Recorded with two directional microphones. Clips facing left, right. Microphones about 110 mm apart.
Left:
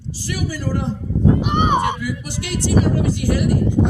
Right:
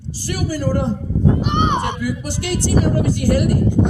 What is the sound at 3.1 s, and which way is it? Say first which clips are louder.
Speech: right 3 dB; 45° right (ahead or behind).